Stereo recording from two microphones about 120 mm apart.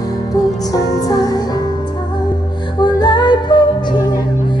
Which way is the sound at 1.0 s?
30° left (ahead or behind).